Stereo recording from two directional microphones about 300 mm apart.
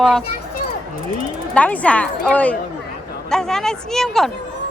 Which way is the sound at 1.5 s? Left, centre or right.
Centre.